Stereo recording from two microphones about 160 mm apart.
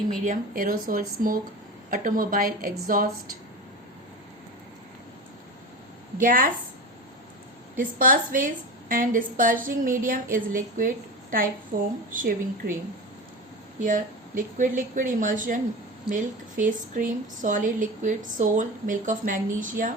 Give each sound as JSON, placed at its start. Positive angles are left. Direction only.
{"t": 0.3, "sound": "a woman's voice", "side_deg": -60}
{"t": 6.1, "sound": "a woman's voice", "side_deg": -60}
{"t": 7.8, "sound": "a woman's voice", "side_deg": -60}
{"t": 13.8, "sound": "a woman's voice", "side_deg": -55}